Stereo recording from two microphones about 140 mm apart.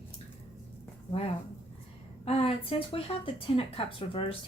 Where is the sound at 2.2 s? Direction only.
45° left (ahead or behind).